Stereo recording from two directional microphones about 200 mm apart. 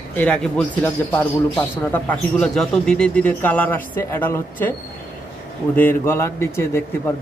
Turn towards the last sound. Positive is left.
turn(degrees=15)  # may be behind; listen again after turning